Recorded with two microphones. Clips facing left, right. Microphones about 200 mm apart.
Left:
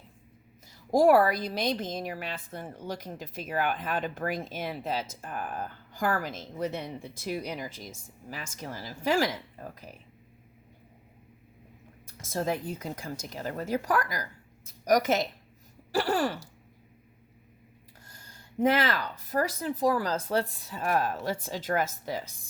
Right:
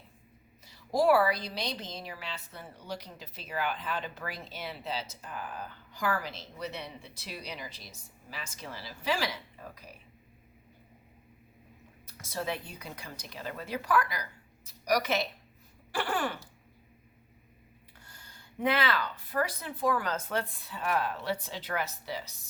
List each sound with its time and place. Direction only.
0.7 s a woman's voice: 45° left (ahead or behind)
12.2 s a woman's voice: 45° left (ahead or behind)
18.0 s speech: 40° left (ahead or behind)